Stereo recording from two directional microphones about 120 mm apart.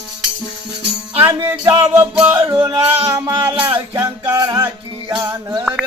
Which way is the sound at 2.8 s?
25° right (ahead or behind).